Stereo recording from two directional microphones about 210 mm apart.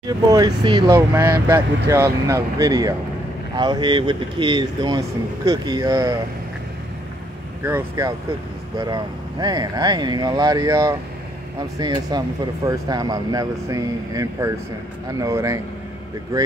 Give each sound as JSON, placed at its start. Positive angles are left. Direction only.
{"t": 0.3, "sound": "speech", "side_deg": -20}
{"t": 7.6, "sound": "speech", "side_deg": -10}